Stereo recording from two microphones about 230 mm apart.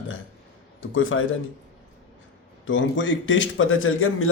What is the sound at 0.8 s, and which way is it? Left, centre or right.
Speech, left.